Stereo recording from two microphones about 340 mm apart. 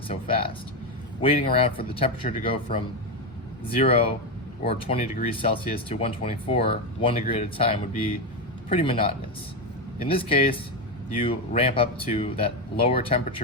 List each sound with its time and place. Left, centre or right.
0.1 s speech: centre